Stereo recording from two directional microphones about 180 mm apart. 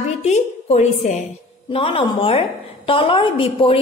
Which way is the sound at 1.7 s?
30° left (ahead or behind).